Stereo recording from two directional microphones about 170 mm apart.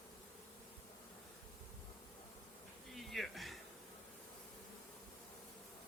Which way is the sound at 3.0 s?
Centre (ahead or behind).